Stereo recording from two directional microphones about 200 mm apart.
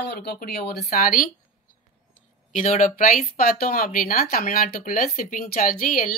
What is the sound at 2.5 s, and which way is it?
Speech, 40° left (ahead or behind).